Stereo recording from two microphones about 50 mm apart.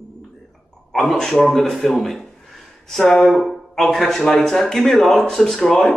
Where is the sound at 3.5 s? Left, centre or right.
Centre.